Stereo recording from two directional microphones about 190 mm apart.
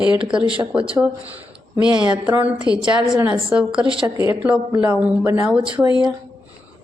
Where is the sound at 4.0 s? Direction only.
10° right (ahead or behind).